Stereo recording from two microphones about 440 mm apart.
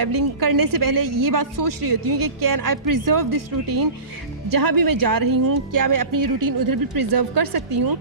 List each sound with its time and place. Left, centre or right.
0.0 s a woman's voice: right